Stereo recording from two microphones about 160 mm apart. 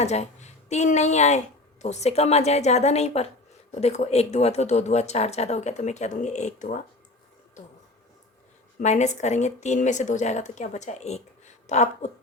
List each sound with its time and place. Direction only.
0.0 s a woman's voice: 45° left (ahead or behind)
8.8 s speech: 45° left (ahead or behind)